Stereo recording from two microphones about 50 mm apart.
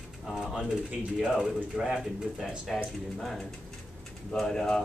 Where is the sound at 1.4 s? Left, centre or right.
Centre.